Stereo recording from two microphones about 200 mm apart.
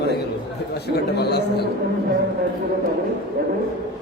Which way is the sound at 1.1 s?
55° left (ahead or behind).